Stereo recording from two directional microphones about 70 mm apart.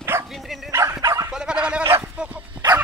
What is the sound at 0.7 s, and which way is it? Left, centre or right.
Dog, right.